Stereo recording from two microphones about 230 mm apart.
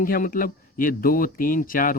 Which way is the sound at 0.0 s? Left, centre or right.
Left.